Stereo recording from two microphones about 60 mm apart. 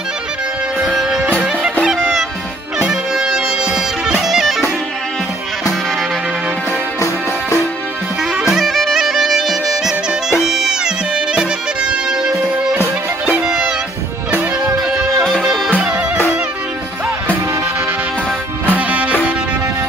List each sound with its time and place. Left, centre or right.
1.9 s music: centre
8.2 s music: centre
15.1 s music: centre
18.7 s music: right